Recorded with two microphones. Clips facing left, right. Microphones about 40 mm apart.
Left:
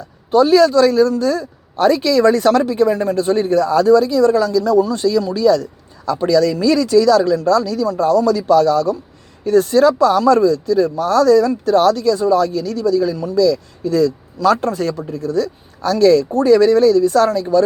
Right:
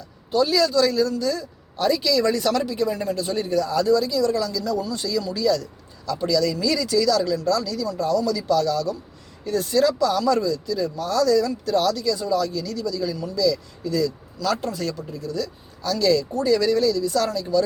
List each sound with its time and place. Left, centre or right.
0.3 s speech: left